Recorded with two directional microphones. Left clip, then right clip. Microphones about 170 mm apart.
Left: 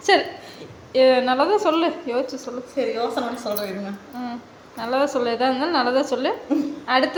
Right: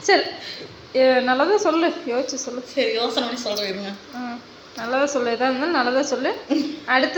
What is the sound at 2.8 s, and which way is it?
Speech, 20° left (ahead or behind).